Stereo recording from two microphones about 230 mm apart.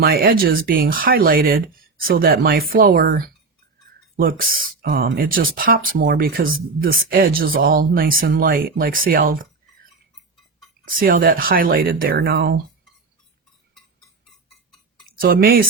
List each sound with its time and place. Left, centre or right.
0.0 s speech: right
10.8 s speech: right
15.0 s speech: right